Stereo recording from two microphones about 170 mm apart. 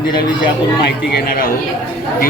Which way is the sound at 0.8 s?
70° left (ahead or behind).